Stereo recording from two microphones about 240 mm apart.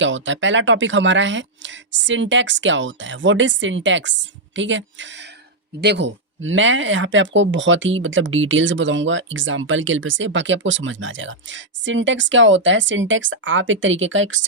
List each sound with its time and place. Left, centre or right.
0.0 s speech: right